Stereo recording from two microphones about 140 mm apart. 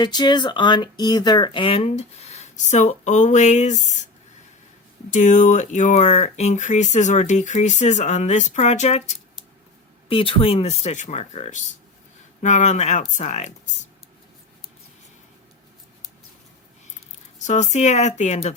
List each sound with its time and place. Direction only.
0.0 s speech: 30° left (ahead or behind); by 3.9 s 55° left (ahead or behind)
5.1 s speech: 60° left (ahead or behind)
10.1 s speech: 40° left (ahead or behind); by 13.5 s 55° left (ahead or behind)
17.4 s speech: 55° left (ahead or behind)